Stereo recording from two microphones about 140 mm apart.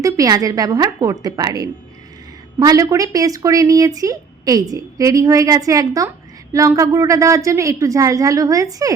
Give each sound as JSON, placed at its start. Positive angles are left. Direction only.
{"t": 0.0, "sound": "speech", "side_deg": -25}